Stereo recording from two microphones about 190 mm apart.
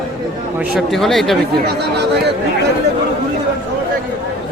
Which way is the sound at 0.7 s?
Centre (ahead or behind).